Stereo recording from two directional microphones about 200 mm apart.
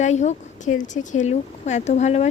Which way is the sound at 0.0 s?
35° left (ahead or behind).